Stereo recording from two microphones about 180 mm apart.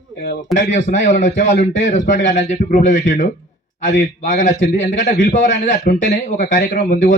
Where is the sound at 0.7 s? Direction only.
45° left (ahead or behind).